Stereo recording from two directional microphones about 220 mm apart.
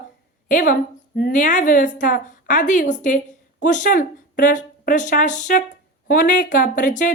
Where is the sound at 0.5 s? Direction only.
35° left (ahead or behind).